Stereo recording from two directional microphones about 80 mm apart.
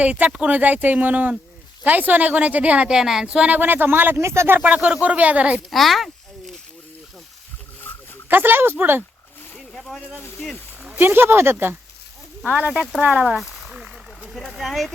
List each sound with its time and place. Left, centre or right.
0.0 s a woman's voice: centre
4.6 s speech: centre
5.7 s a sound: centre
8.3 s a woman's voice: right
9.6 s boat: centre
10.2 s speech: left
10.9 s a woman's voice: right
13.2 s a sound: centre
14.2 s speech: centre